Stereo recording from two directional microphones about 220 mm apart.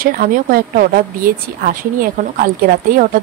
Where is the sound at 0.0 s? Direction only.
40° right (ahead or behind).